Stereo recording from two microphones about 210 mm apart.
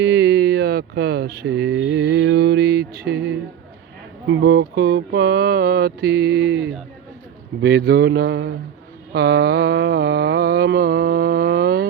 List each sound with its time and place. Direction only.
0.0 s a sound: 55° right (ahead or behind)
4.3 s mantra: 60° right (ahead or behind)
7.6 s mantra: 50° right (ahead or behind)